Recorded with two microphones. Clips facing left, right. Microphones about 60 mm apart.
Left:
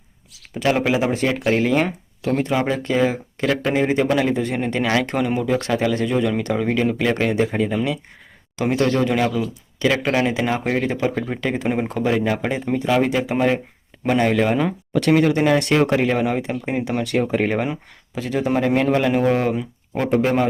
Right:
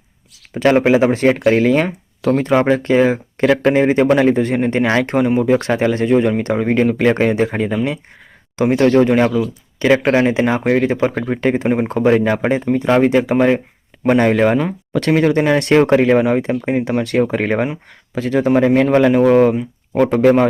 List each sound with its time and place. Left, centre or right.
0.5 s speech: right
19.5 s speech: right
20.1 s speech: right